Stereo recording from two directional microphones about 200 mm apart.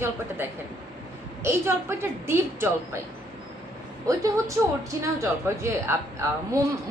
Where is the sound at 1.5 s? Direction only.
10° right (ahead or behind).